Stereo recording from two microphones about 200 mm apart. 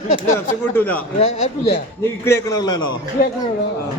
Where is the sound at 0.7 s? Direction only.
10° left (ahead or behind).